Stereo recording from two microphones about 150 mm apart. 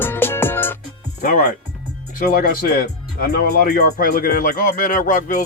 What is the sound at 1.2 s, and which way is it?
Music, 80° left.